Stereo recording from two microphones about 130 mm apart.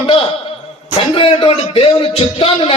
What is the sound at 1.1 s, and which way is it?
A man's voice, 45° left (ahead or behind).